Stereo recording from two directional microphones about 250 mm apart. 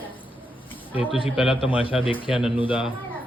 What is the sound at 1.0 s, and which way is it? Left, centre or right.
Speech, left.